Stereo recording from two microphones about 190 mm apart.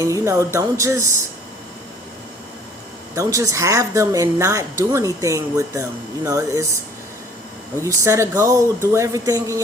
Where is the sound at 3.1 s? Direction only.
15° right (ahead or behind).